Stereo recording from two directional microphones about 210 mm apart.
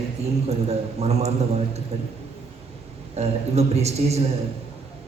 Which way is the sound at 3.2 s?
30° right (ahead or behind).